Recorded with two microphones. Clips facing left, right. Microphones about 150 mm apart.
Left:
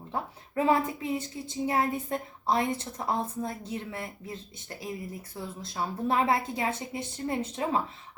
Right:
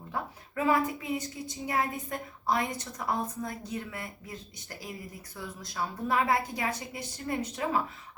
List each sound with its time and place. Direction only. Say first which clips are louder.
0.1 s speech: left 2 dB; 30° left (ahead or behind)